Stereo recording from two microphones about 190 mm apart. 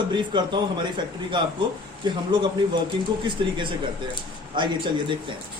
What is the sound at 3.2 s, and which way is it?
Speech, 25° right (ahead or behind).